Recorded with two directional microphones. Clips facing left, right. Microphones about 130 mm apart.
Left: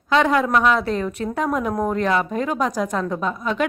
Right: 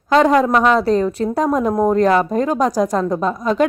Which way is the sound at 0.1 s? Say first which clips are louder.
Right 5 dB; 35° right (ahead or behind).